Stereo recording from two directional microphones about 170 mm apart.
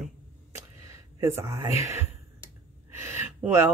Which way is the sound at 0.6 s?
15° right (ahead or behind).